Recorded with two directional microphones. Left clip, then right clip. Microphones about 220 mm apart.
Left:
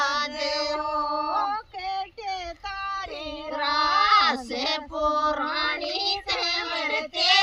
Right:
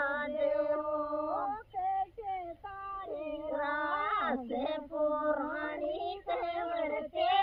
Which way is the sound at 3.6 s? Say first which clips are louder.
Left 13 dB; 45° left (ahead or behind).